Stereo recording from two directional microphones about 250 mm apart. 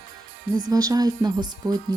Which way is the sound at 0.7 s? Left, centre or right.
Centre.